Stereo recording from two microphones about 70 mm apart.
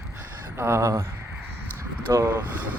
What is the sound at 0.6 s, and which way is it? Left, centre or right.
Speech, right.